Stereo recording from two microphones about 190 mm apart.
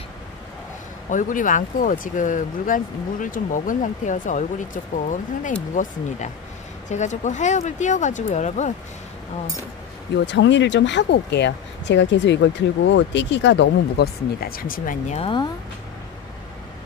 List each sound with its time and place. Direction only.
1.1 s speech: 45° left (ahead or behind)
10.2 s speech: 70° left (ahead or behind); by 15.1 s 45° left (ahead or behind)
15.1 s speech: 25° left (ahead or behind)